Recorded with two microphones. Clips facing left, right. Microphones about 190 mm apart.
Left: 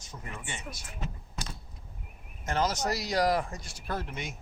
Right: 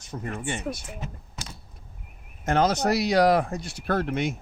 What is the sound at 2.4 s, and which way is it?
Speech, 60° right (ahead or behind).